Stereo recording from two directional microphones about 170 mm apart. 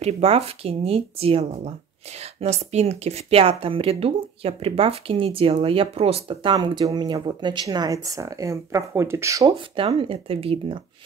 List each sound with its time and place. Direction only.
0.0 s speech: 35° right (ahead or behind); by 9.6 s 20° right (ahead or behind)
9.8 s speech: 30° right (ahead or behind)